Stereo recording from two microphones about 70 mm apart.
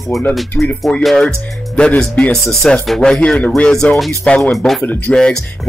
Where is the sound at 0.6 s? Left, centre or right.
Centre.